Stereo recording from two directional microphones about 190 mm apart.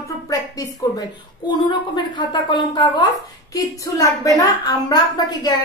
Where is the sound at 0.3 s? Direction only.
20° left (ahead or behind).